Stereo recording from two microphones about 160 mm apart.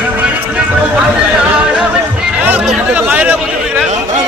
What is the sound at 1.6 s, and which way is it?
Music, 5° right (ahead or behind).